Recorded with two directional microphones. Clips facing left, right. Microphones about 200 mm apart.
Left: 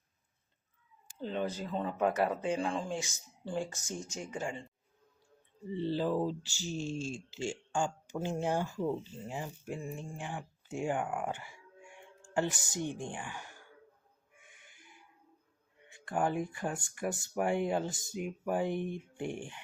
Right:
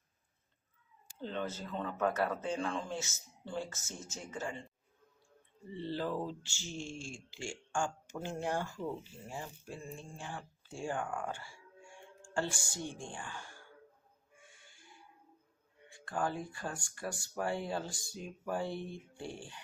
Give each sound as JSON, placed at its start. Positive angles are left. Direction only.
{"t": 1.2, "sound": "speech", "side_deg": 15}
{"t": 5.7, "sound": "speech", "side_deg": 15}
{"t": 16.0, "sound": "speech", "side_deg": 20}